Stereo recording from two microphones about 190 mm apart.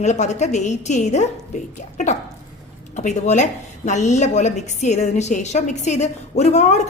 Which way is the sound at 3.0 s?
40° left (ahead or behind).